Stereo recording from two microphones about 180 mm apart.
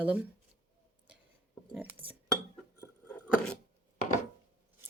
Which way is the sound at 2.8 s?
5° left (ahead or behind).